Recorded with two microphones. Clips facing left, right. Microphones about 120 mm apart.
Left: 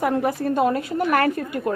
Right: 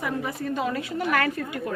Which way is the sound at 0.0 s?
65° left (ahead or behind).